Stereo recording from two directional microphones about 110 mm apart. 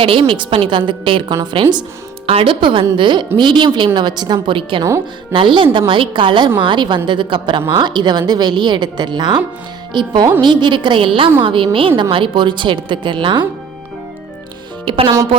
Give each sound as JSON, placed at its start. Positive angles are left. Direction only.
{"t": 0.0, "sound": "a woman's voice", "side_deg": -50}
{"t": 4.8, "sound": "speech", "side_deg": -25}
{"t": 5.3, "sound": "a woman's voice", "side_deg": -50}
{"t": 14.8, "sound": "speech", "side_deg": -50}